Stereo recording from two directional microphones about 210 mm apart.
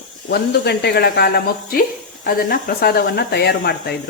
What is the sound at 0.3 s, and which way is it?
Speech, 50° left (ahead or behind).